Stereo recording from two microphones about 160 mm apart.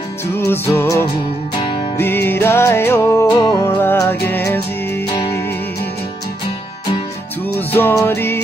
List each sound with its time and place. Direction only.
0.3 s music: 15° left (ahead or behind)
1.1 s music: 30° left (ahead or behind)
2.2 s music: 15° left (ahead or behind)
7.4 s music: 15° left (ahead or behind)